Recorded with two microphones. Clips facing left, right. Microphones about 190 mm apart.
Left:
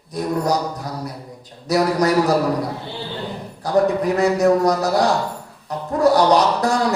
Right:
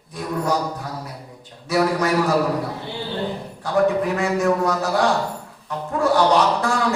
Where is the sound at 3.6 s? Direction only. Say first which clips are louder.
Left 2 dB; 40° left (ahead or behind).